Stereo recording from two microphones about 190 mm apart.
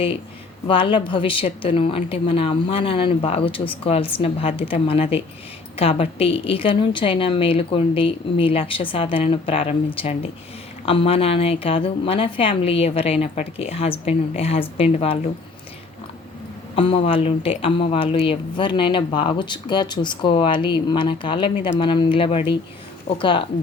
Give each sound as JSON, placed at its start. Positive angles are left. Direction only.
{"t": 0.7, "sound": "a woman's voice", "side_deg": 25}
{"t": 16.7, "sound": "speech", "side_deg": 30}